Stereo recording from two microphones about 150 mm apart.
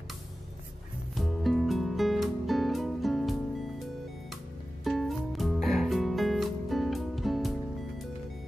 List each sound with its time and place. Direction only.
1.1 s music: centre (ahead or behind)
4.8 s music: centre (ahead or behind)